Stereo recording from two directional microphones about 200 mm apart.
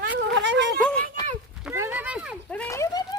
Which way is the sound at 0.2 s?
65° right (ahead or behind).